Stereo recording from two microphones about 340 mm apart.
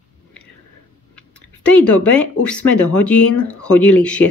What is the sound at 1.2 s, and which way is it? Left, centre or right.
Speech, centre.